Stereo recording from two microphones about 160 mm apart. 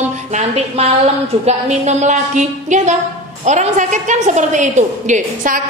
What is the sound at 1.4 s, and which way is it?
A woman's voice, 45° right (ahead or behind).